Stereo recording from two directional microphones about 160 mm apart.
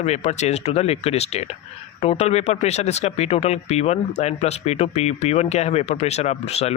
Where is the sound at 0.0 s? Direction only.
45° left (ahead or behind).